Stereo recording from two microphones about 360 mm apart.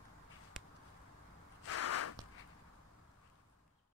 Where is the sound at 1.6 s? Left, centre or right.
Left.